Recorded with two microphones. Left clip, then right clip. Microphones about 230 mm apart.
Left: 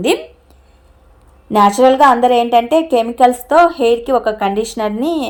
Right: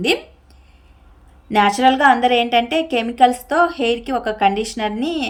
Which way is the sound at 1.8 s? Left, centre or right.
Left.